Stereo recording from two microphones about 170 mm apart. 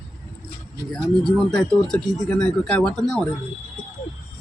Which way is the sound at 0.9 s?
Centre (ahead or behind).